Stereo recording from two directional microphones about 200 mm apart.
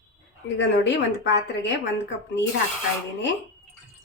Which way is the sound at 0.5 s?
65° left (ahead or behind).